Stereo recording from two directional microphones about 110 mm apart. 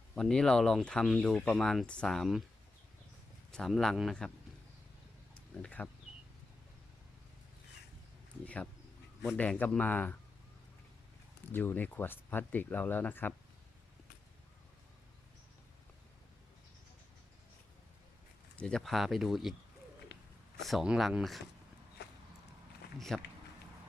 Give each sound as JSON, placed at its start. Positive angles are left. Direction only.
{"t": 0.2, "sound": "speech", "side_deg": 5}
{"t": 3.5, "sound": "speech", "side_deg": 5}
{"t": 5.6, "sound": "speech", "side_deg": 15}
{"t": 9.4, "sound": "speech", "side_deg": 15}
{"t": 11.5, "sound": "speech", "side_deg": 15}
{"t": 18.5, "sound": "speech", "side_deg": 5}
{"t": 20.7, "sound": "speech", "side_deg": -5}
{"t": 23.0, "sound": "speech", "side_deg": 5}